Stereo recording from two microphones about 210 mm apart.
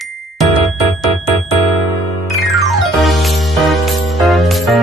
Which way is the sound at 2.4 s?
Centre (ahead or behind).